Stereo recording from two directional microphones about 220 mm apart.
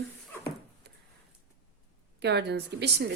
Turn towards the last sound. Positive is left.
turn(degrees=-50)  # may be behind; listen again after turning